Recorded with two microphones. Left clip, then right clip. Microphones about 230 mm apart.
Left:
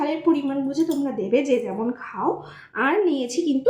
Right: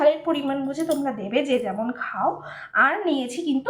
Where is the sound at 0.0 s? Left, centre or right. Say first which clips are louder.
Right 2 dB; right.